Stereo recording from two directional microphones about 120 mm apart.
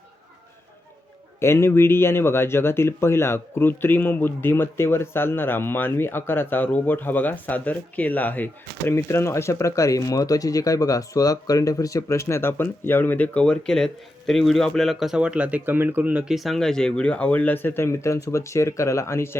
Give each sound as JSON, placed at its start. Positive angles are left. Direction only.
{"t": 1.4, "sound": "speech", "side_deg": 20}